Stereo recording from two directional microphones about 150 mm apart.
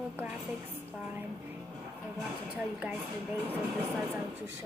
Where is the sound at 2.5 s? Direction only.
10° right (ahead or behind).